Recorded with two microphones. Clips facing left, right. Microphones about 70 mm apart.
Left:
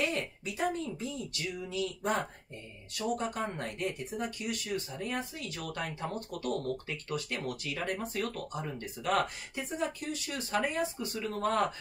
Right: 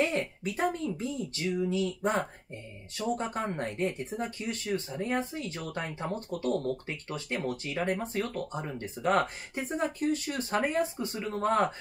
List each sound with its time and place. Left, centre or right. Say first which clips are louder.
0.0 s speech: right 4 dB; right
9.6 s speech: right 4 dB; right